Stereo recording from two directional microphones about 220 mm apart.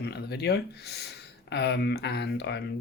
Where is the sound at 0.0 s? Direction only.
50° left (ahead or behind).